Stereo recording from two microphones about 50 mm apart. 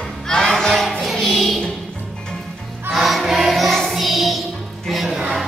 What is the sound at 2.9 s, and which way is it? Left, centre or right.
Music, centre.